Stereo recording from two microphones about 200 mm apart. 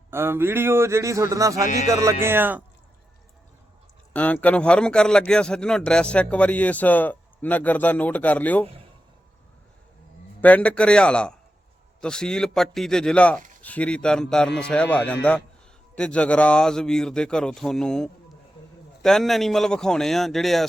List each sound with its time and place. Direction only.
0.1 s a man's voice: 10° right (ahead or behind)
1.6 s music: 35° left (ahead or behind)
1.9 s a man's voice: 15° right (ahead or behind)
4.1 s a man's voice: 5° left (ahead or behind)
10.4 s a man's voice: 5° left (ahead or behind)